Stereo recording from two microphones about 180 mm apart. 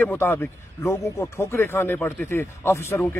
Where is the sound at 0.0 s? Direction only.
10° left (ahead or behind).